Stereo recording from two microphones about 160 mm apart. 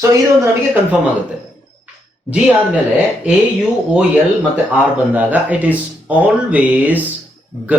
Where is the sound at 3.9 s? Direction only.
5° right (ahead or behind).